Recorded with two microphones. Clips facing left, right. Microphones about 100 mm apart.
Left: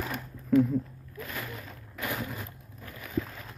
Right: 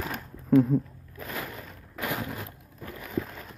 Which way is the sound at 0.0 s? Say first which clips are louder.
Even; 15° right (ahead or behind).